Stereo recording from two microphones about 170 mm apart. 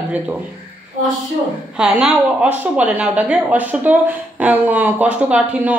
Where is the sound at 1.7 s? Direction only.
5° right (ahead or behind).